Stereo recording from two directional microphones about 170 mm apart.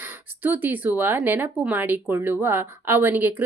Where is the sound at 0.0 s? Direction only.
10° right (ahead or behind).